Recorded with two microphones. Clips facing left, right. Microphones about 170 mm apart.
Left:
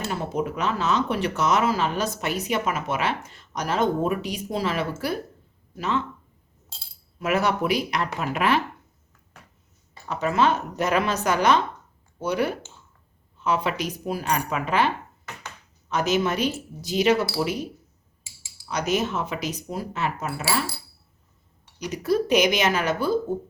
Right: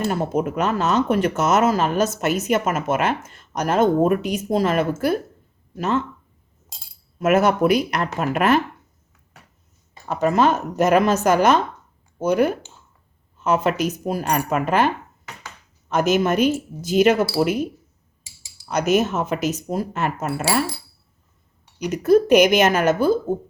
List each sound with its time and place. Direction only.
0.1 s speech: 50° right (ahead or behind)
7.2 s speech: 50° right (ahead or behind)
10.1 s speech: 45° right (ahead or behind)
18.7 s speech: 50° right (ahead or behind)
21.8 s speech: 50° right (ahead or behind)